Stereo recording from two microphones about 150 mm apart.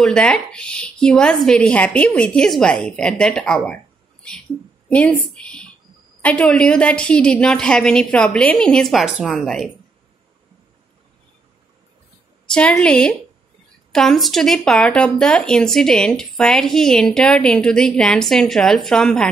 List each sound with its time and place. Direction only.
0.0 s speech: 5° left (ahead or behind)
4.8 s a woman's voice: 10° left (ahead or behind)
12.8 s speech: 5° left (ahead or behind)